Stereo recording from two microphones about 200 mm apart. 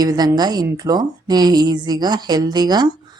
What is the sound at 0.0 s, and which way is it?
A woman's voice, 20° right (ahead or behind).